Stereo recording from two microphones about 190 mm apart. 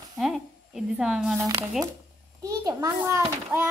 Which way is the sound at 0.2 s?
Centre (ahead or behind).